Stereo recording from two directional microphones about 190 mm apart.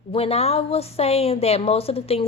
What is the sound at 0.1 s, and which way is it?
A woman's voice, 30° left (ahead or behind).